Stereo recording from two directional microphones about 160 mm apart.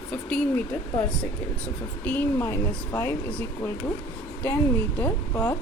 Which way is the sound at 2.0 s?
10° left (ahead or behind).